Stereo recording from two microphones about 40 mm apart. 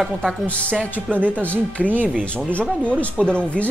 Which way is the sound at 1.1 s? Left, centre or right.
Right.